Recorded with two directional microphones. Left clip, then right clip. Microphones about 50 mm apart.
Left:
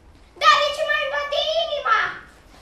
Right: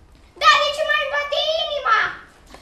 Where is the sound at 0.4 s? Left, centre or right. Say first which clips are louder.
Right 1 dB; centre.